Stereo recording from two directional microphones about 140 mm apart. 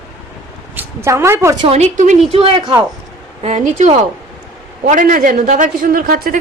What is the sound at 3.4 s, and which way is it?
A man's voice, 60° right (ahead or behind).